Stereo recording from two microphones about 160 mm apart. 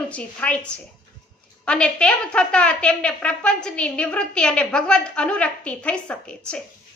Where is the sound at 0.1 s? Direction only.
10° left (ahead or behind).